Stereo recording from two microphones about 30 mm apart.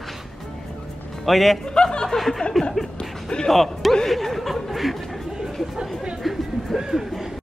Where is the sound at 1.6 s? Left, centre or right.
Left.